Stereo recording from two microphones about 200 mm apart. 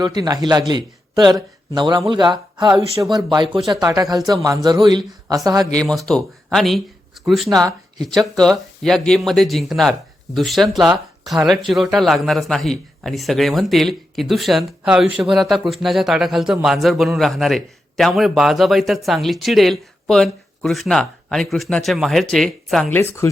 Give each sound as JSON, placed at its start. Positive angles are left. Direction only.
{"t": 0.0, "sound": "speech", "side_deg": -20}
{"t": 5.7, "sound": "a man's voice", "side_deg": 5}
{"t": 8.0, "sound": "a man's voice", "side_deg": 0}